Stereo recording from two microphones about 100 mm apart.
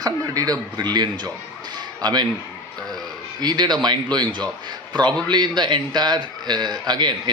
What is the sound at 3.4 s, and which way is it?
Speech, 45° right (ahead or behind).